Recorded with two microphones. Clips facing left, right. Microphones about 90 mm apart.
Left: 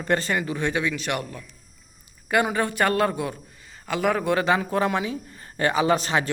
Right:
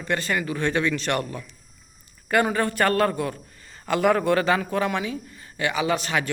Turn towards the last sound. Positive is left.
turn(degrees=30)  # may be behind; listen again after turning